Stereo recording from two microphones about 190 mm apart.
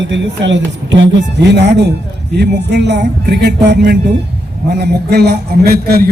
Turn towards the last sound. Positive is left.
turn(degrees=-55)  # may be behind; listen again after turning